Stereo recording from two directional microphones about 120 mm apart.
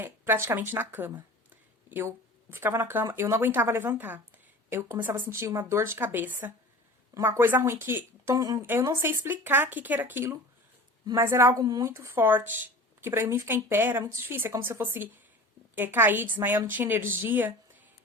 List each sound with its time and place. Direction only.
0.0 s speech: 20° right (ahead or behind)
8.6 s speech: 20° right (ahead or behind)
11.6 s speech: 30° right (ahead or behind); by 17.8 s 15° right (ahead or behind)